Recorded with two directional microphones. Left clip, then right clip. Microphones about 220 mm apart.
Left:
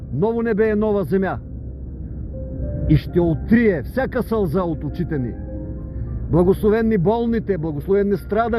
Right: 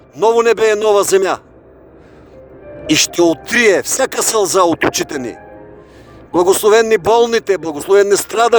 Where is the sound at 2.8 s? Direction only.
45° right (ahead or behind).